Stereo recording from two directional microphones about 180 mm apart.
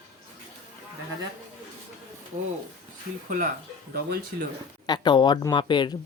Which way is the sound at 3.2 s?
45° right (ahead or behind).